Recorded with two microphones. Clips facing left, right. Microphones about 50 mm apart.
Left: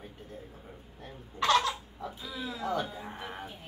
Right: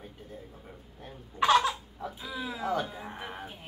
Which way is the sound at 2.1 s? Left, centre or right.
Centre.